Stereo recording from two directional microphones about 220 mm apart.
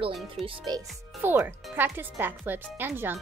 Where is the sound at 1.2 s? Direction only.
10° right (ahead or behind).